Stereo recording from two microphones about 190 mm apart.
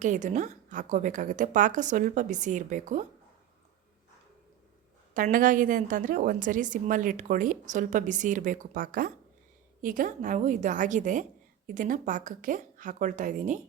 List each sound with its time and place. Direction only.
0.0 s a woman's voice: 40° right (ahead or behind)
5.1 s a woman's voice: 45° right (ahead or behind)